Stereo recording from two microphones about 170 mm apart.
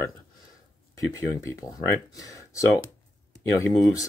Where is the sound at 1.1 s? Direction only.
20° left (ahead or behind).